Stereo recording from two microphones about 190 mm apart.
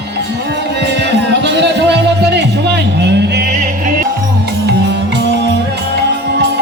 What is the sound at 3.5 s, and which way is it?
Music, 45° right (ahead or behind).